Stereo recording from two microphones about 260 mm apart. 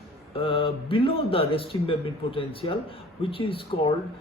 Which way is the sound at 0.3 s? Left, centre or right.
Left.